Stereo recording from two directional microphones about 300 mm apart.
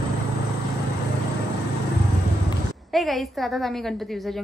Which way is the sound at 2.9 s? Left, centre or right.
Centre.